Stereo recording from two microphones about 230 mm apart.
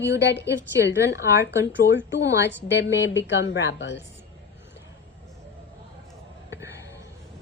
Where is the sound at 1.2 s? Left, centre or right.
Left.